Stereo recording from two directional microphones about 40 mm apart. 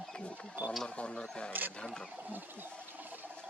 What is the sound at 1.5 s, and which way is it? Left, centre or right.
Speech, right.